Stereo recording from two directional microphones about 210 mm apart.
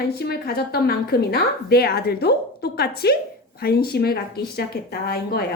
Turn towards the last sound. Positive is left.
turn(degrees=50)  # may be behind; listen again after turning